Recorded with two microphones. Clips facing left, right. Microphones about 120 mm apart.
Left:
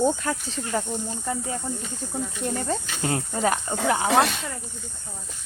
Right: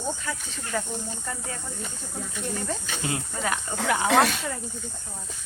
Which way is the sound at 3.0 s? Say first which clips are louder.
Left 7 dB; 35° left (ahead or behind).